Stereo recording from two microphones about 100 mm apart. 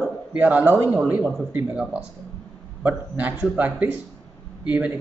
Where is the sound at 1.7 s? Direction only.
10° right (ahead or behind).